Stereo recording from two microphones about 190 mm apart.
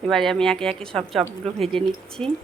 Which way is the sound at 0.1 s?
Centre (ahead or behind).